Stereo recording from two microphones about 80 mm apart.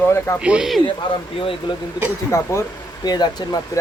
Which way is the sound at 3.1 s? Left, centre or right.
Left.